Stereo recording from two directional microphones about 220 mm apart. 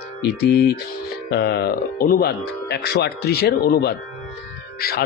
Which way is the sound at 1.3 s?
45° left (ahead or behind).